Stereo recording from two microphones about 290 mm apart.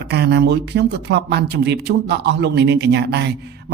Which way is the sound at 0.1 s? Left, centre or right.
Right.